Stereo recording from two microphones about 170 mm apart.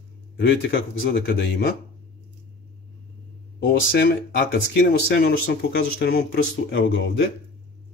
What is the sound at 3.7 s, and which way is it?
Speech, 80° left.